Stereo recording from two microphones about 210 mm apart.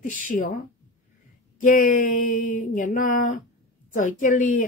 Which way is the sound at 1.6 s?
40° left (ahead or behind).